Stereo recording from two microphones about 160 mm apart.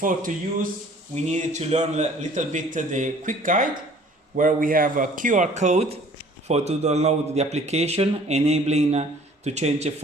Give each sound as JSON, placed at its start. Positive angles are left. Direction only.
{"t": 0.0, "sound": "a man's voice", "side_deg": -55}